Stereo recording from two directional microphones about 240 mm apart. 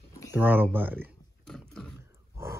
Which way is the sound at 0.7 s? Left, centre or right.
Centre.